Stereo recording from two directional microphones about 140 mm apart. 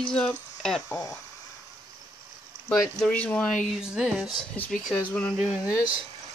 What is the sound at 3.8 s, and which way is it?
Speech, 5° right (ahead or behind).